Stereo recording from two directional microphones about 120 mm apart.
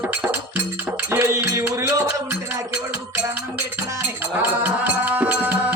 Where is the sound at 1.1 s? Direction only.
20° right (ahead or behind).